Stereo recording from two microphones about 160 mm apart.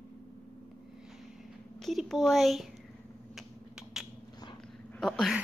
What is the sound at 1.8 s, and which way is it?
Speech, centre (ahead or behind).